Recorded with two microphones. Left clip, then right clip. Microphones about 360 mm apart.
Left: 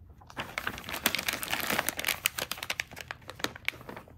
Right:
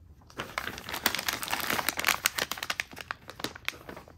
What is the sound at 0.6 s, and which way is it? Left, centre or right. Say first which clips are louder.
Crumpling: right 1 dB; centre.